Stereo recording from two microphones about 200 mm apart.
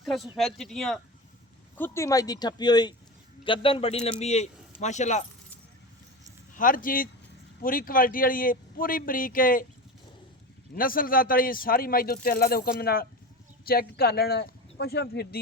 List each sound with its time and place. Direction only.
0.0 s speech: centre (ahead or behind); by 5.2 s 35° left (ahead or behind)
6.6 s speech: 45° left (ahead or behind)
10.8 s speech: 45° left (ahead or behind)